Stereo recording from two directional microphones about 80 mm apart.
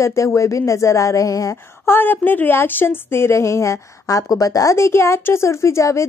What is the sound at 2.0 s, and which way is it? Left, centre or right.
Speech, left.